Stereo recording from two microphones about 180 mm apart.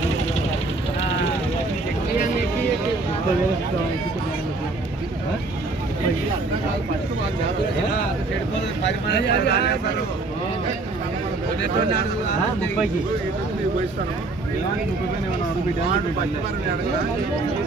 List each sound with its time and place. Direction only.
8.8 s speech: 70° left (ahead or behind)